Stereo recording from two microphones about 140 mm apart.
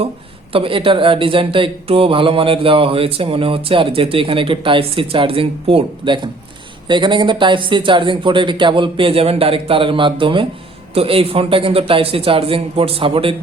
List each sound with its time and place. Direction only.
0.5 s speech: 40° right (ahead or behind)